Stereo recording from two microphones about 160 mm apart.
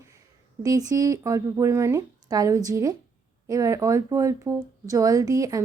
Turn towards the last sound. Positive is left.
turn(degrees=-20)  # may be behind; listen again after turning